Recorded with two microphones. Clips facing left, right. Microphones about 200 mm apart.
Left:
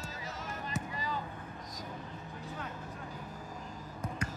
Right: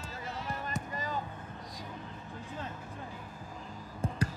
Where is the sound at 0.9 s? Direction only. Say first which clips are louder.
Right 4 dB; 45° right (ahead or behind).